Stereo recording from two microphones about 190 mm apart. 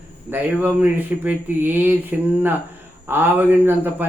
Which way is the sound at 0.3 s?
10° right (ahead or behind).